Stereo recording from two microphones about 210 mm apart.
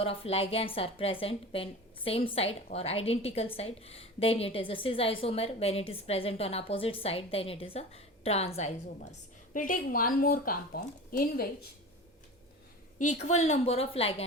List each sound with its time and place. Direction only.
0.0 s a woman's voice: 25° left (ahead or behind); by 11.4 s 45° left (ahead or behind)
13.2 s a woman's voice: 30° left (ahead or behind)